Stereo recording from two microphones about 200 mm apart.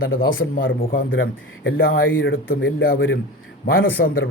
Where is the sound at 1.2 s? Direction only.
75° left (ahead or behind).